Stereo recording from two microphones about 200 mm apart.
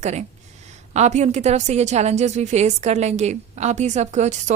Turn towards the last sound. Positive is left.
turn(degrees=-35)  # may be behind; listen again after turning